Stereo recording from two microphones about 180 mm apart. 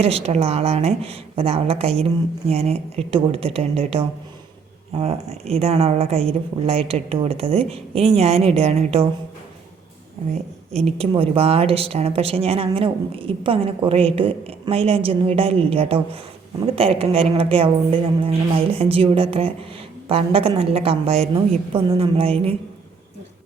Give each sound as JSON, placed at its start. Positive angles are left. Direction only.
{"t": 0.0, "sound": "speech", "side_deg": -35}
{"t": 10.8, "sound": "speech", "side_deg": -35}